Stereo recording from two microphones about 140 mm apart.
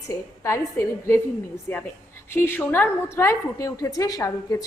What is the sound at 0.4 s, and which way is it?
A woman's voice, 20° left (ahead or behind).